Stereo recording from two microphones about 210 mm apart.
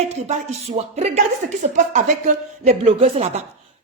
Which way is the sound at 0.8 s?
35° right (ahead or behind).